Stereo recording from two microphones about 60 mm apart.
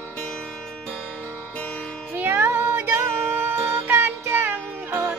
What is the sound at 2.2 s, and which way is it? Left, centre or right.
Child singing, right.